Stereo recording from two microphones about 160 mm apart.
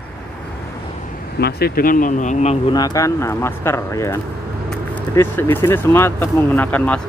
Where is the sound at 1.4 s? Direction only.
70° left (ahead or behind); by 2.5 s 50° left (ahead or behind).